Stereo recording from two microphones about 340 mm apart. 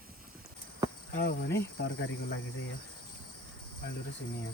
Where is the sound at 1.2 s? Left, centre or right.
Left.